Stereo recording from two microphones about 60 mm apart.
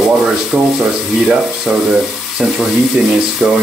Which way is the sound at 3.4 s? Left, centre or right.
Centre.